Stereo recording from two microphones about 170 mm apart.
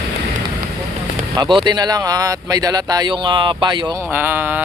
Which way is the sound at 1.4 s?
30° right (ahead or behind).